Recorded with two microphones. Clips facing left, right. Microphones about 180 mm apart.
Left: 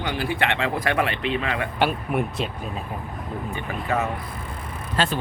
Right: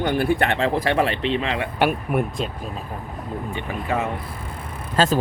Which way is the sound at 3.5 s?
20° right (ahead or behind).